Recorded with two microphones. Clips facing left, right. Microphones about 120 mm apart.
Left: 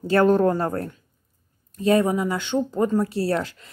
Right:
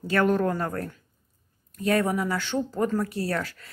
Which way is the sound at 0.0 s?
30° left (ahead or behind).